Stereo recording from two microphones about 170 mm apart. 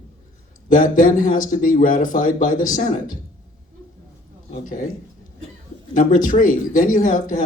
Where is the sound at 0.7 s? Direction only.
55° left (ahead or behind).